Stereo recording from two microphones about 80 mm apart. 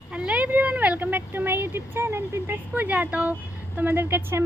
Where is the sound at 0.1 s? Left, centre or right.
Centre.